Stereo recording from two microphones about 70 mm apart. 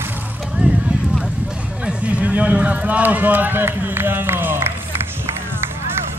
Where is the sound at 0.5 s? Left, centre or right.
Centre.